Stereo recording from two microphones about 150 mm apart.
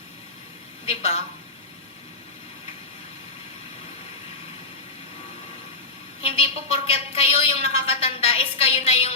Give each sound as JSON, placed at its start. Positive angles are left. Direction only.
{"t": 0.9, "sound": "a woman's voice", "side_deg": 45}
{"t": 6.2, "sound": "a woman's voice", "side_deg": 40}